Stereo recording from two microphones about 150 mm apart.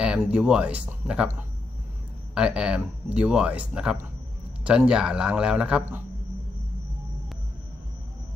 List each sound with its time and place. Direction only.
0.0 s a man's voice: 5° right (ahead or behind)